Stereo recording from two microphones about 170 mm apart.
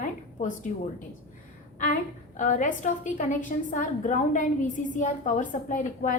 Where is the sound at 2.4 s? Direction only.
50° left (ahead or behind).